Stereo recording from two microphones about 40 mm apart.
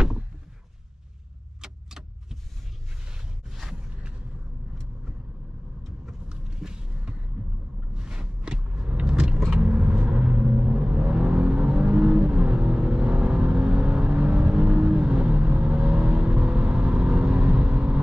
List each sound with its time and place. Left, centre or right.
1.6 s vehicle: centre
6.2 s a sound: right
8.0 s vehicle: right